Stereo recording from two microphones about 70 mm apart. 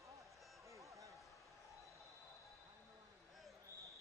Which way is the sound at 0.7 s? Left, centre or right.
Right.